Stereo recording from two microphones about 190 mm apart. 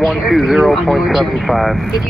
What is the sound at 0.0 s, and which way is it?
Speech, centre (ahead or behind).